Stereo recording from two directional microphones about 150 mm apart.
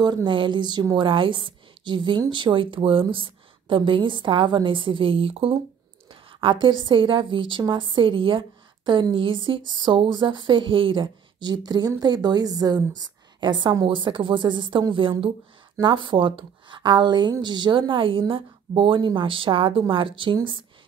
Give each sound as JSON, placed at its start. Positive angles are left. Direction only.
{"t": 0.0, "sound": "a woman's voice", "side_deg": -30}